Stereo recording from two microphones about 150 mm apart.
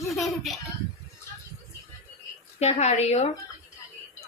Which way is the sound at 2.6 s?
45° left (ahead or behind).